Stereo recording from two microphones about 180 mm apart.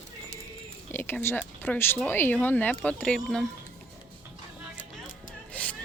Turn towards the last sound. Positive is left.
turn(degrees=10)  # may be behind; listen again after turning